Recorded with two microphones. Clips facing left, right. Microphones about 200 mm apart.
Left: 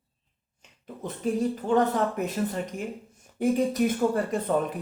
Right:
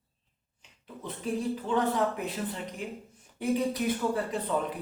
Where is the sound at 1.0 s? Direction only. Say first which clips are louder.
Left 5 dB; 45° left (ahead or behind).